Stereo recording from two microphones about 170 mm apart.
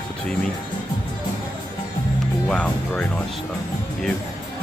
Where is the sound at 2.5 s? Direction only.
5° left (ahead or behind).